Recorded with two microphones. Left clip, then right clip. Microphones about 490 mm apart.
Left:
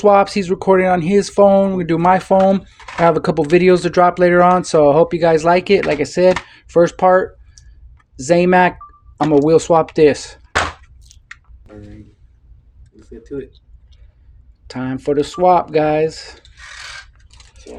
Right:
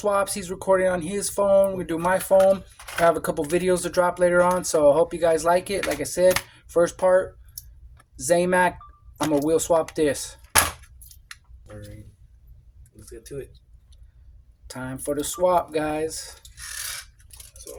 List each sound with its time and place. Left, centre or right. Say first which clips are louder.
0.0 s speech: left 12 dB; right
14.7 s speech: left 10 dB; right